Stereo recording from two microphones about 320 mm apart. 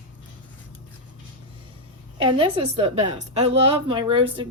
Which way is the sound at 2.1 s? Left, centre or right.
Centre.